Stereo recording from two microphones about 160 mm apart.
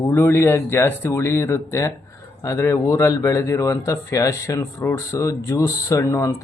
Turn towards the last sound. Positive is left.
turn(degrees=20)  # may be behind; listen again after turning